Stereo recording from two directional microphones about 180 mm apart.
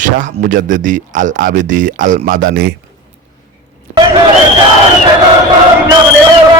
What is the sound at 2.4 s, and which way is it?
Speech, 60° right (ahead or behind).